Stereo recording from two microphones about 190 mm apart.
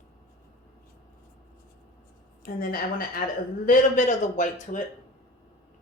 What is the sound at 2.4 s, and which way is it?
A woman's voice, 50° left (ahead or behind).